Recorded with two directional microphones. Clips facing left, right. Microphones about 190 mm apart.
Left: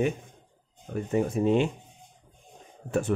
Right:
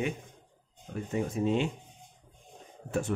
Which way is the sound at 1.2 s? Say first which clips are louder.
Left 5 dB; 55° left (ahead or behind).